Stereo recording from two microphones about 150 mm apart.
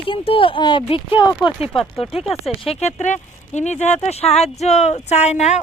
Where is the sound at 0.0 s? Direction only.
35° left (ahead or behind).